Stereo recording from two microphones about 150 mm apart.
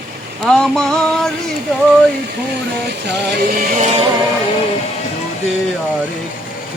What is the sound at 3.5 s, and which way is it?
Music, 70° right (ahead or behind).